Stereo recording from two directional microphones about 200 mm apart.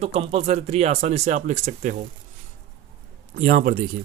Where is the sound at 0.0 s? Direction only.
30° right (ahead or behind).